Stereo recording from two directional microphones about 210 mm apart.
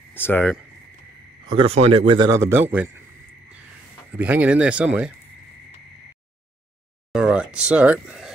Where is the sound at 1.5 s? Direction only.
25° right (ahead or behind); by 2.9 s 10° right (ahead or behind).